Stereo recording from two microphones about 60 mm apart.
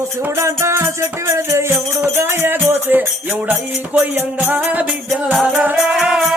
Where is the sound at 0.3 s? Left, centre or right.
Right.